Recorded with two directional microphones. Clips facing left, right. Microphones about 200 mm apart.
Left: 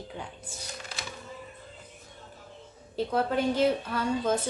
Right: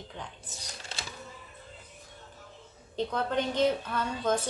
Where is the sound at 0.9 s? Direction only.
25° right (ahead or behind).